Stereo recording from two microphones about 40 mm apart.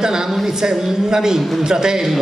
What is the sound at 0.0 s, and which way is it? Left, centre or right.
A man's voice, centre.